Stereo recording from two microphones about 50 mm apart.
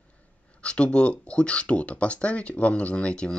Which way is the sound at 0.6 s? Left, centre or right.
Left.